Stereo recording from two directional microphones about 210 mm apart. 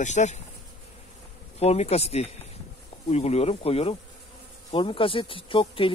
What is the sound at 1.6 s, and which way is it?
Speech, 30° left (ahead or behind).